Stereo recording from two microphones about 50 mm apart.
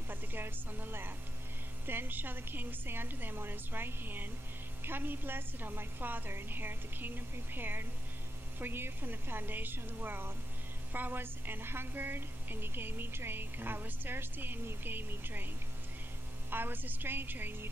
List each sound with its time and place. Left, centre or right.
0.1 s a woman's voice: right